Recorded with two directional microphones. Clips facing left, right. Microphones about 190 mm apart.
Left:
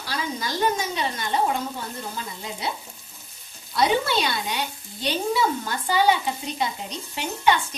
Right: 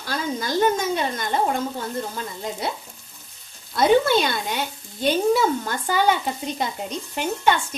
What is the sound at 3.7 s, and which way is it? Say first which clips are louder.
A woman's voice: right 5 dB; 50° right (ahead or behind).